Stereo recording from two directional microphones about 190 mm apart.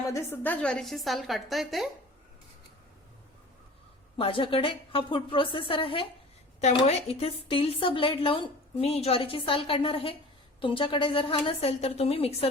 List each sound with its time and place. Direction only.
0.1 s a woman's voice: 10° left (ahead or behind)
4.2 s a woman's voice: 30° left (ahead or behind)